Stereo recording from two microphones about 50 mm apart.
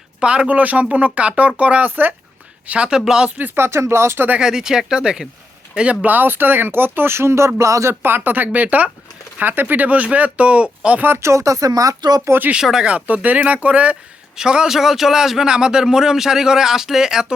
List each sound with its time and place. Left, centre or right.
0.2 s speech: right
3.0 s speech: centre
3.5 s speech: right
4.4 s speech: centre; by 7.9 s right
8.0 s speech: right
11.2 s speech: right
12.3 s speech: right
12.8 s speech: right
14.3 s speech: centre
14.8 s speech: centre